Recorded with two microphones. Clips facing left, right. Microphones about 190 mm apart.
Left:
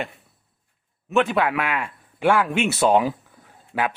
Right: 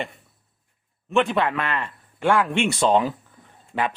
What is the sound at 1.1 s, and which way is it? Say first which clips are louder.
Speech: left 1 dB; centre (ahead or behind).